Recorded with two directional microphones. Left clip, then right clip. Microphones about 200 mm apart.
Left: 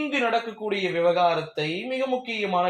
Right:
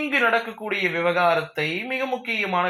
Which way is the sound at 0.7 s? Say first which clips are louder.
Even; 5° right (ahead or behind).